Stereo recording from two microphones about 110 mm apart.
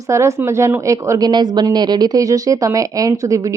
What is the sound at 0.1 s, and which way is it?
Speech, 25° right (ahead or behind).